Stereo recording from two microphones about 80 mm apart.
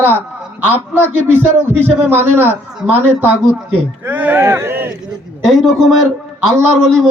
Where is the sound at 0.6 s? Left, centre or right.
Right.